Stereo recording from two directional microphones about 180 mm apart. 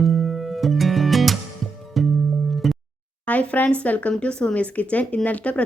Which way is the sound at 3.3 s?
10° left (ahead or behind).